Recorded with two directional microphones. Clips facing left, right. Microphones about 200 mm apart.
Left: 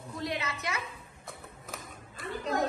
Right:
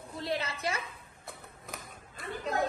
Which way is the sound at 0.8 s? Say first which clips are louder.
Left 2 dB; centre (ahead or behind).